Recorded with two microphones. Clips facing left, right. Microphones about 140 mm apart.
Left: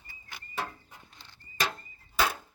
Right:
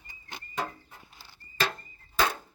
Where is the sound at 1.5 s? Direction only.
15° left (ahead or behind).